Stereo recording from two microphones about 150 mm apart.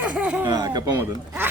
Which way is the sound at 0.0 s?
10° right (ahead or behind).